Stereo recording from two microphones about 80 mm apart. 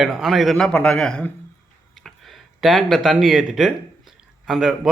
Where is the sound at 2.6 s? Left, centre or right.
Centre.